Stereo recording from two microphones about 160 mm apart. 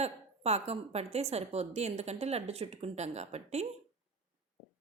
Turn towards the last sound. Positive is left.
turn(degrees=-45)  # may be behind; listen again after turning